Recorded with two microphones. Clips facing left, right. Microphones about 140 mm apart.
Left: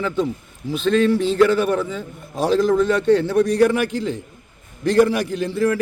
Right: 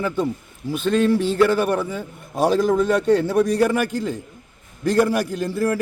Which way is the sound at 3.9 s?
50° right (ahead or behind).